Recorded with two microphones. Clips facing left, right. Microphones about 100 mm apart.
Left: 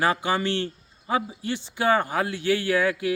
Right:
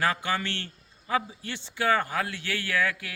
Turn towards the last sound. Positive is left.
turn(degrees=20)  # may be behind; listen again after turning